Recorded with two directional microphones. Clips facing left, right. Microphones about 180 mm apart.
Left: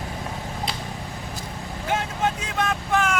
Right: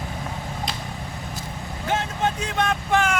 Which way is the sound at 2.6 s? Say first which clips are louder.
Right 1 dB; centre (ahead or behind).